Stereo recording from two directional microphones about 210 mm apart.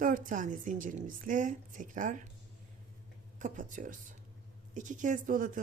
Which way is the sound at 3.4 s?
40° right (ahead or behind).